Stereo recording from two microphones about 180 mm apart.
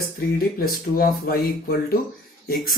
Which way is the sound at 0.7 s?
55° left (ahead or behind).